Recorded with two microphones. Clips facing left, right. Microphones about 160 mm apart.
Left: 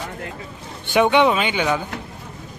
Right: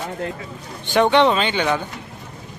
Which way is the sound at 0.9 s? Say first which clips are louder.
Even; 10° left (ahead or behind).